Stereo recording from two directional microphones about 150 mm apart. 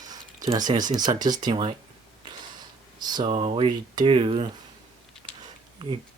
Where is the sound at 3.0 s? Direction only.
30° right (ahead or behind).